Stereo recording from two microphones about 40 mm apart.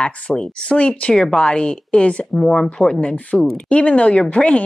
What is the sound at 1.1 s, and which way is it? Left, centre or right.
Speech, left.